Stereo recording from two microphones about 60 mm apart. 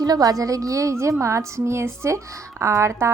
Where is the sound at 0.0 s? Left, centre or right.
Right.